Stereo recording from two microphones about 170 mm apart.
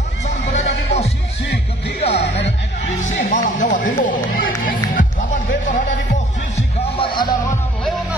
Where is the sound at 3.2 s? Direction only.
50° left (ahead or behind).